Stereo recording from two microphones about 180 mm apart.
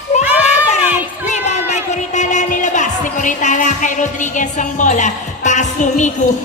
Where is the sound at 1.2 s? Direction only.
40° left (ahead or behind).